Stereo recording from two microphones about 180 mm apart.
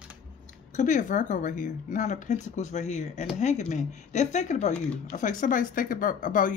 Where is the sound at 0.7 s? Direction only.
45° left (ahead or behind).